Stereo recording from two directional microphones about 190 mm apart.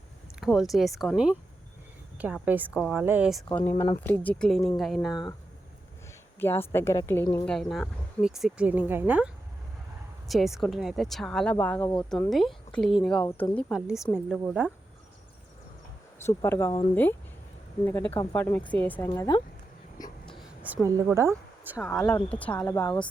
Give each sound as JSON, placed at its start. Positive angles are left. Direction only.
{"t": 0.3, "sound": "a woman's voice", "side_deg": 0}
{"t": 3.5, "sound": "speech", "side_deg": 10}
{"t": 6.4, "sound": "speech", "side_deg": 10}
{"t": 7.4, "sound": "speech", "side_deg": 0}
{"t": 16.4, "sound": "speech", "side_deg": 15}
{"t": 20.0, "sound": "writing", "side_deg": 20}
{"t": 20.6, "sound": "a woman's voice", "side_deg": -10}
{"t": 21.8, "sound": "speech", "side_deg": 10}